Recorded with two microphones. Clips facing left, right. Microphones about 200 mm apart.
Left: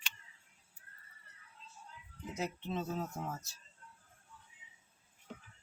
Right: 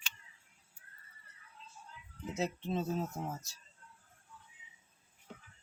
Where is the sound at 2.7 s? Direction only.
30° right (ahead or behind).